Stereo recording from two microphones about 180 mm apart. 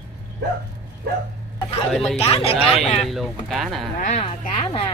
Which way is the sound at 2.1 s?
35° left (ahead or behind).